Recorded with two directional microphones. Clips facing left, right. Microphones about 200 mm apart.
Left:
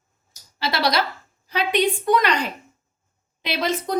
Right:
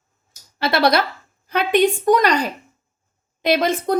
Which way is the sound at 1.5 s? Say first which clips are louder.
Right 4 dB; 50° right (ahead or behind).